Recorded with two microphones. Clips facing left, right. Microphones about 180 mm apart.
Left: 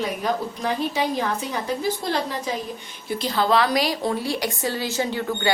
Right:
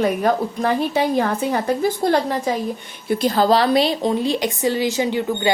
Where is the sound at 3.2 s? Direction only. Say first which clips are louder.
Right 4 dB; 45° right (ahead or behind); by 5.5 s 15° right (ahead or behind).